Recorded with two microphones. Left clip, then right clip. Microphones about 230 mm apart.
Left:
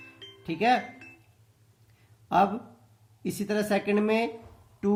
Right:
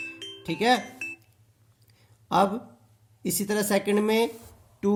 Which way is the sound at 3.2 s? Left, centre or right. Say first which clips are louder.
Right 2 dB; right.